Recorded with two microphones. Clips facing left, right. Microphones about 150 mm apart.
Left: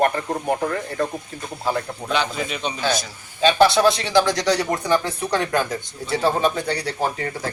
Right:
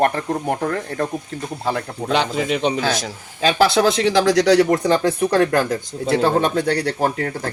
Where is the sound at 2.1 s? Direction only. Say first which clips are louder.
Right 5 dB; 90° right.